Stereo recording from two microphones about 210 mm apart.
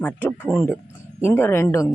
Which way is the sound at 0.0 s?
10° left (ahead or behind).